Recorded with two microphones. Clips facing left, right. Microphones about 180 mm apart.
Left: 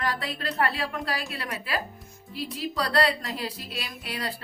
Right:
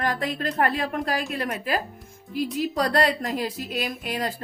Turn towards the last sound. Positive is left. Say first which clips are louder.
# right 6 dB
turn(degrees=-45)  # may be behind; listen again after turning